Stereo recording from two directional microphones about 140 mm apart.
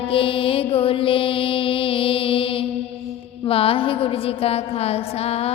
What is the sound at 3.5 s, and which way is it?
A woman's voice, 40° left (ahead or behind).